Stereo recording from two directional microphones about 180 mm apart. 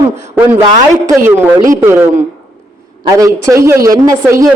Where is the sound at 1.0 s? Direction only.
15° right (ahead or behind).